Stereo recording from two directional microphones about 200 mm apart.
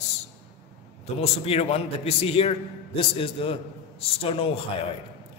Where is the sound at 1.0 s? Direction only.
30° left (ahead or behind).